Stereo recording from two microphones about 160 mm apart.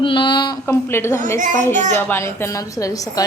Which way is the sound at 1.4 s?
55° right (ahead or behind).